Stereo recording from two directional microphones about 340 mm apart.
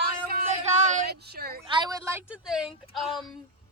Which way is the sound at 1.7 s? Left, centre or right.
Centre.